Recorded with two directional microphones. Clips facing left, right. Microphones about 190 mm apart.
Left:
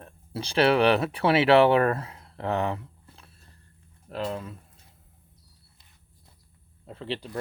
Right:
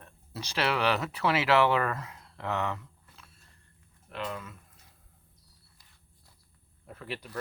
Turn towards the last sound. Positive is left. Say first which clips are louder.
# left 6 dB
turn(degrees=25)  # may be behind; listen again after turning